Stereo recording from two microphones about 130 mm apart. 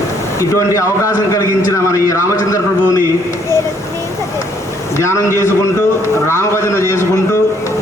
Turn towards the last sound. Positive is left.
turn(degrees=20)  # may be behind; listen again after turning